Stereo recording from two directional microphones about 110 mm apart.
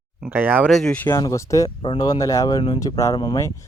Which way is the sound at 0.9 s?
15° left (ahead or behind).